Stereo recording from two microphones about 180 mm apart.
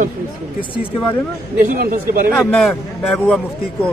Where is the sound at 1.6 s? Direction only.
50° right (ahead or behind).